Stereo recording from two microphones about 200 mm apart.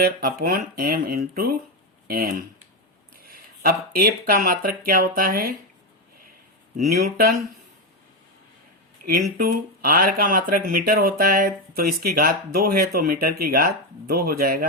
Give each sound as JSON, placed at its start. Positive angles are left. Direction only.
{"t": 0.0, "sound": "speech", "side_deg": -50}
{"t": 6.7, "sound": "speech", "side_deg": -50}
{"t": 9.0, "sound": "speech", "side_deg": -45}